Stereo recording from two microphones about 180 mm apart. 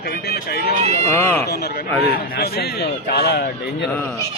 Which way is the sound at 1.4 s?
60° left (ahead or behind).